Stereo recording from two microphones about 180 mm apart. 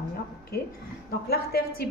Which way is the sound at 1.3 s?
60° left (ahead or behind).